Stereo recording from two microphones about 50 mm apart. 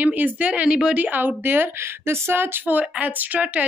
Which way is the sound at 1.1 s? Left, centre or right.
Right.